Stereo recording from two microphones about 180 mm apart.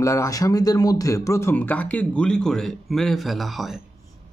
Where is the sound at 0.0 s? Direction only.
15° left (ahead or behind); by 3.8 s centre (ahead or behind).